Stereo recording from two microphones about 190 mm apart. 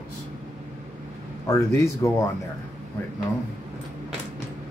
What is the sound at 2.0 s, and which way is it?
Speech, 15° left (ahead or behind).